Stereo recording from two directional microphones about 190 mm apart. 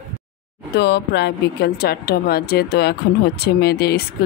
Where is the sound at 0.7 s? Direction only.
60° left (ahead or behind).